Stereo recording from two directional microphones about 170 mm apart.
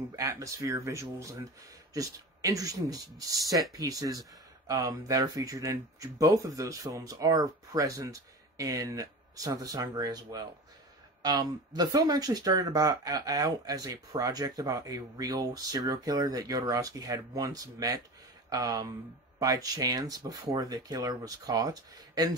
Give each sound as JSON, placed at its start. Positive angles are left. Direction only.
{"t": 0.1, "sound": "speech", "side_deg": -20}